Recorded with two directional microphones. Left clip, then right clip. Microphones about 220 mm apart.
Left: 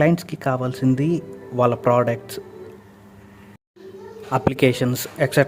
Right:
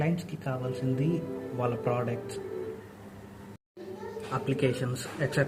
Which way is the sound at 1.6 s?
45° left (ahead or behind).